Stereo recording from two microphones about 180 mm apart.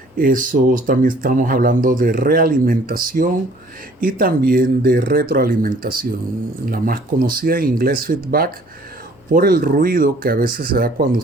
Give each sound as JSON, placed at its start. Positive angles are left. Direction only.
{"t": 0.2, "sound": "speech", "side_deg": -50}